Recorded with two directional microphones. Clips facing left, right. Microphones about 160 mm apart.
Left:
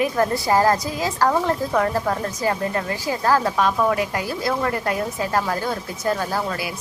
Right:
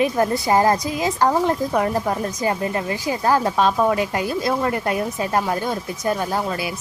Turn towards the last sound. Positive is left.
turn(degrees=-20)  # may be behind; listen again after turning